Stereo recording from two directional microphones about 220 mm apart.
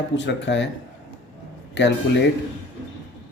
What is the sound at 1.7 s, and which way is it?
Speech, 55° left (ahead or behind).